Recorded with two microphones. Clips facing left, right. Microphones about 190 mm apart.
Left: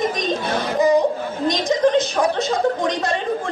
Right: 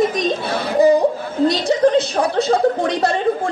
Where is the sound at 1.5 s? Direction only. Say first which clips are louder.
Even; 35° right (ahead or behind).